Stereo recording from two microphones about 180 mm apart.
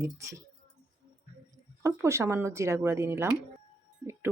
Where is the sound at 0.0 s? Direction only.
15° right (ahead or behind).